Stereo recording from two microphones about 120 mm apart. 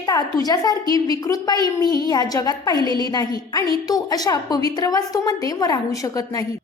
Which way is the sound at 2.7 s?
40° right (ahead or behind).